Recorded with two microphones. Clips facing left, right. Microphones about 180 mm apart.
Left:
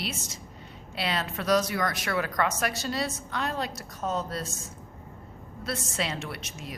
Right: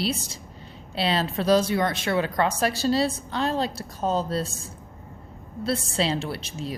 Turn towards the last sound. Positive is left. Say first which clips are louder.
# right 7 dB
turn(degrees=-30)  # may be behind; listen again after turning